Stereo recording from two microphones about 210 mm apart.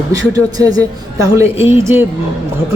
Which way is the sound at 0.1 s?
20° right (ahead or behind).